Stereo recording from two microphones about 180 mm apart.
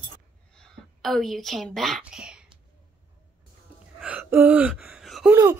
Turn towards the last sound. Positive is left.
turn(degrees=-15)  # may be behind; listen again after turning